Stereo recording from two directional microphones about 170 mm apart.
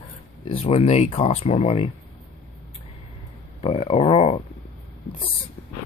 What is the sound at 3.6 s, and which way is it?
Speech, 35° left (ahead or behind).